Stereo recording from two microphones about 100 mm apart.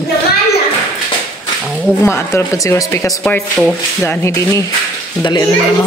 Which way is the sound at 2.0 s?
25° left (ahead or behind).